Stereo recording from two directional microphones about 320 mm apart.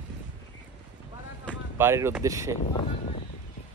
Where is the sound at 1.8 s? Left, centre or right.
Centre.